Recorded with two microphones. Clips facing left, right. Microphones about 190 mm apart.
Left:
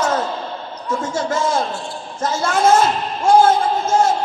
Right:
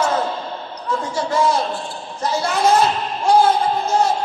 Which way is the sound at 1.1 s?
50° left (ahead or behind).